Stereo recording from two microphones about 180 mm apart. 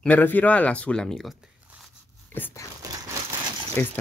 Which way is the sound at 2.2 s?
10° left (ahead or behind).